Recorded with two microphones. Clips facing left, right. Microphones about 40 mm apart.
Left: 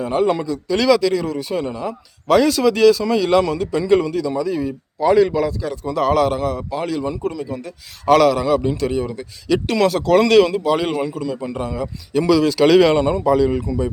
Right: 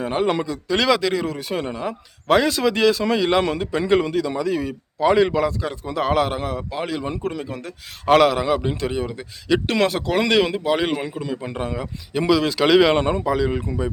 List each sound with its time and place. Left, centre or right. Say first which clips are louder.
0.0 s a man's voice: left 3 dB; right
2.4 s a man's voice: left 5 dB; right
5.8 s speech: left 4 dB; right
7.1 s a man's voice: left 3 dB; right
8.0 s a man's voice: left 2 dB; right
10.1 s speech: left 9 dB; centre
12.7 s speech: left 1 dB; centre
13.0 s a man's voice: left 3 dB; right
13.2 s speech: left 5 dB; right